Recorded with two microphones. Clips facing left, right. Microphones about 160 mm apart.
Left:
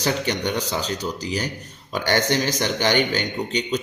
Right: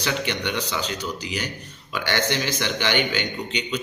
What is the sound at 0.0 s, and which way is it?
A man's voice, 40° left (ahead or behind).